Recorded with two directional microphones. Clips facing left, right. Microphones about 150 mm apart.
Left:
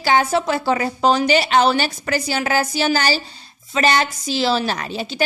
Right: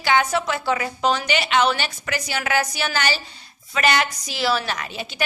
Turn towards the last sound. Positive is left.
turn(degrees=35)  # may be behind; listen again after turning